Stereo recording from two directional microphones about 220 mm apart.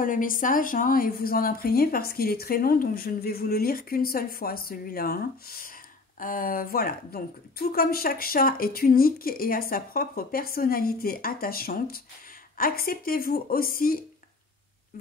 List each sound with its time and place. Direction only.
0.0 s a woman's voice: 40° left (ahead or behind)